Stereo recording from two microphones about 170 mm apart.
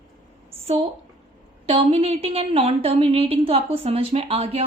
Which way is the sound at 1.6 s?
40° right (ahead or behind).